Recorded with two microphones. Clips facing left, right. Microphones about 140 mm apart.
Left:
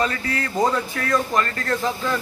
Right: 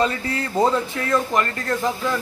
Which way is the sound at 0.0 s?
25° right (ahead or behind).